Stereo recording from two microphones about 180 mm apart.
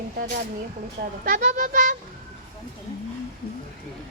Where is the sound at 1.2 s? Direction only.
45° right (ahead or behind).